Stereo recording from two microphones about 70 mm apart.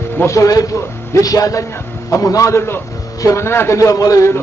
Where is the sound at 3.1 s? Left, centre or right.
Left.